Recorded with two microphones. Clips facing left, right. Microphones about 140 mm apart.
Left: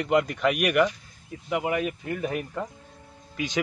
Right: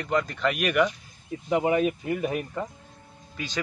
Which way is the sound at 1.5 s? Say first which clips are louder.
Right 4 dB; 25° right (ahead or behind).